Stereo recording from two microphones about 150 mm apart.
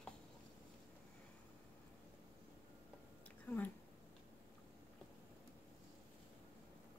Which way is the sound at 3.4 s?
10° left (ahead or behind).